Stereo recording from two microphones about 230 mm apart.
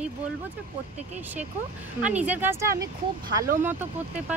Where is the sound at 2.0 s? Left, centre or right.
Centre.